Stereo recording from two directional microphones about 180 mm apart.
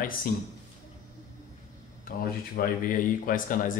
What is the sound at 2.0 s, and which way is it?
Speech, 55° left (ahead or behind).